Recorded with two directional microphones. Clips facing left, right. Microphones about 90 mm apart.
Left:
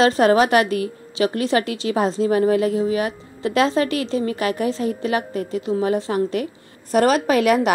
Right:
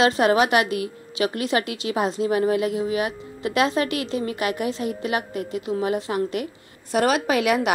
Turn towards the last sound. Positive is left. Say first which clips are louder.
# left 4 dB
turn(degrees=45)  # may be behind; listen again after turning